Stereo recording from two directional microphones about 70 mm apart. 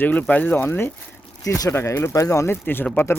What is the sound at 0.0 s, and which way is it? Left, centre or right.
Speech, left.